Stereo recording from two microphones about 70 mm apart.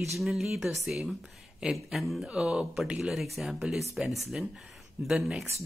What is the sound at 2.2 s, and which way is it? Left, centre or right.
Speech, centre.